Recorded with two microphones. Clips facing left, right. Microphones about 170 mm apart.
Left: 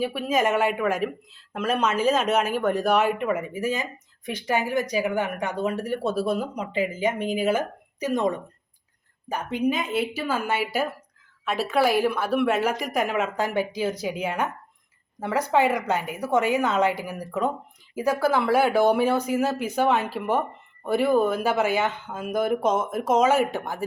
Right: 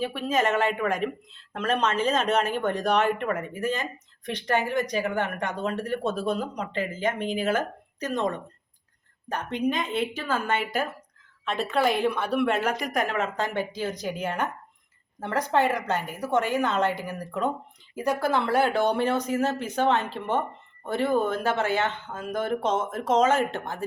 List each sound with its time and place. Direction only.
0.0 s speech: 10° left (ahead or behind)